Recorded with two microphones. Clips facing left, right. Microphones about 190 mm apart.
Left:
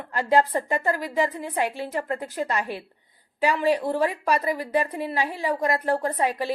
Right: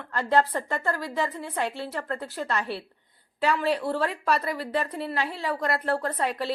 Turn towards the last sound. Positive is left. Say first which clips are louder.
# left 3 dB
turn(degrees=15)  # may be behind; listen again after turning